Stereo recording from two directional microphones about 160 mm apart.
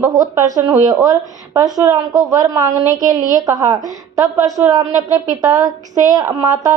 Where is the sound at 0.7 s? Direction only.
20° right (ahead or behind).